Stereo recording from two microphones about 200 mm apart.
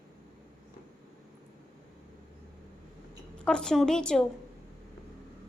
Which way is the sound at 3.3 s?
5° left (ahead or behind).